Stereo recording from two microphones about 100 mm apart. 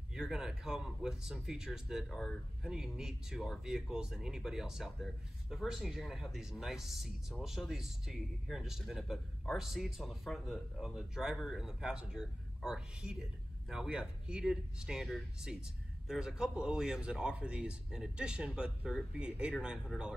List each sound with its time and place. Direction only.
0.1 s a man's voice: 5° right (ahead or behind)